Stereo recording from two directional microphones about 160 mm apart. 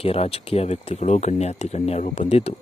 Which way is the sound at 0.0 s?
40° left (ahead or behind).